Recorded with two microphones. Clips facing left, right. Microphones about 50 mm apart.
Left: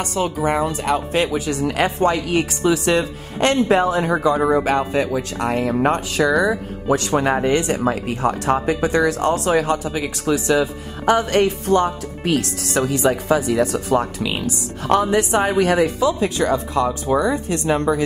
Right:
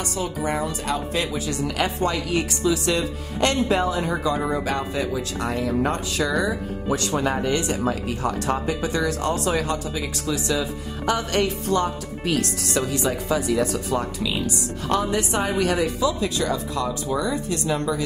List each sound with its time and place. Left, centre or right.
0.4 s speech: left